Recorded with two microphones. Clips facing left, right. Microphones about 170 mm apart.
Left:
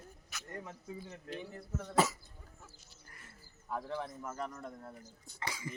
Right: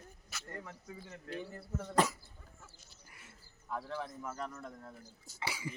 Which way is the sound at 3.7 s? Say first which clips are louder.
Left 1 dB; 15° left (ahead or behind).